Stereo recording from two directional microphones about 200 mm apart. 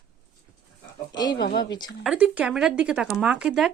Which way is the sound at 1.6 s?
20° left (ahead or behind).